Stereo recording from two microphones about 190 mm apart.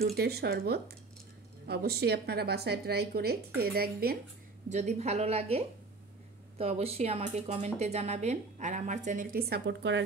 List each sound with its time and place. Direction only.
0.0 s a woman's voice: 55° right (ahead or behind)
4.6 s speech: 35° right (ahead or behind); by 10.0 s 70° right (ahead or behind)